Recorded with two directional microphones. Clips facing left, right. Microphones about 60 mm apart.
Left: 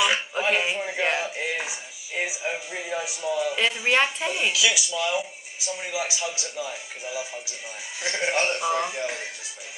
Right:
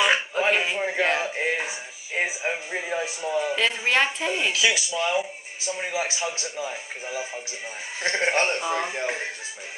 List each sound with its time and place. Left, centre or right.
0.4 s a sound: right
1.1 s music: right
3.3 s a man's voice: right
3.5 s speech: centre
4.5 s a man's voice: right